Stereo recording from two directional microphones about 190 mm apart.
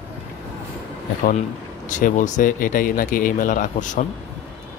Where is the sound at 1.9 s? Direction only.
40° left (ahead or behind).